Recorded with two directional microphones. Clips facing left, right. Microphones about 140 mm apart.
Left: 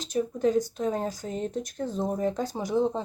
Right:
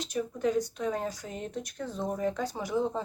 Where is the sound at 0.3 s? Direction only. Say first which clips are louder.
Left 3 dB; 30° left (ahead or behind).